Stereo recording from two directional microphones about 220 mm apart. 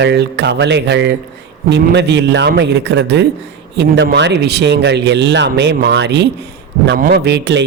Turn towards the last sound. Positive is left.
turn(degrees=-50)  # may be behind; listen again after turning